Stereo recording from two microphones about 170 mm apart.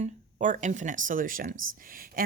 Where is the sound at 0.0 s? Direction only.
45° right (ahead or behind).